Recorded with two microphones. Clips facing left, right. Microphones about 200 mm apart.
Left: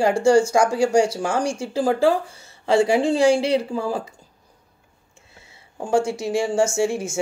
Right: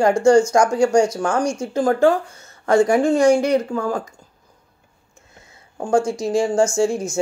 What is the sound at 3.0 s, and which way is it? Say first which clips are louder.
Speech: right 2 dB; 30° left (ahead or behind).